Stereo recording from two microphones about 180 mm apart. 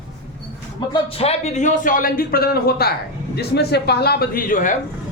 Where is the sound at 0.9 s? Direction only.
30° left (ahead or behind); by 4.7 s 50° left (ahead or behind).